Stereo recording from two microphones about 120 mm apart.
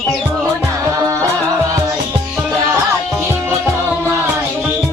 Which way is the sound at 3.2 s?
20° right (ahead or behind).